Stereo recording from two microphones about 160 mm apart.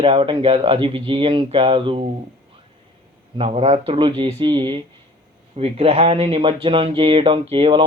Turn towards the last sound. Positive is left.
turn(degrees=-35)  # may be behind; listen again after turning